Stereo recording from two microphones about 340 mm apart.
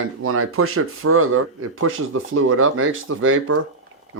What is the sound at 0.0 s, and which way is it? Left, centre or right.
Speech, right.